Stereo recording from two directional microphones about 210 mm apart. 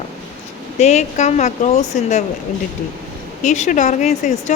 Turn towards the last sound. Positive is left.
turn(degrees=35)  # may be behind; listen again after turning